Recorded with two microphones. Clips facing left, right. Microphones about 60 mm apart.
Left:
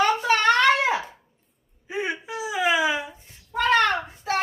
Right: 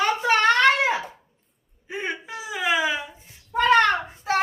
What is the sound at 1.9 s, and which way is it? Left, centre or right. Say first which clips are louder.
Wail: left 2 dB; centre.